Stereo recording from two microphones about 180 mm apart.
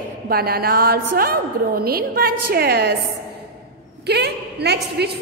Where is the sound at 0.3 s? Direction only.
60° right (ahead or behind).